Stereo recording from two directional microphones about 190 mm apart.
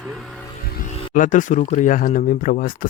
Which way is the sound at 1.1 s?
40° left (ahead or behind).